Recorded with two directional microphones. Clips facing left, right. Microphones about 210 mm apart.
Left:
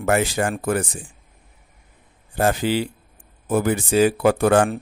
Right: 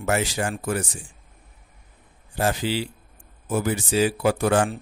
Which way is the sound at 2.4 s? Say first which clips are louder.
Left 4 dB; 55° left (ahead or behind).